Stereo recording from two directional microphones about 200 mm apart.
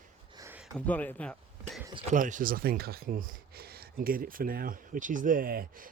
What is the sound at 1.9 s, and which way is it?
Speech, 35° right (ahead or behind).